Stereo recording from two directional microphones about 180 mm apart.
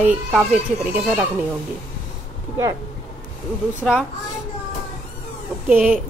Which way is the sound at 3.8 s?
Centre (ahead or behind).